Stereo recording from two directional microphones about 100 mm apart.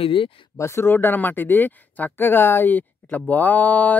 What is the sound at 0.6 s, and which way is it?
Speech, 25° left (ahead or behind).